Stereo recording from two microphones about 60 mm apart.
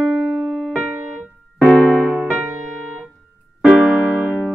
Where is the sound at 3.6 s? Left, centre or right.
Centre.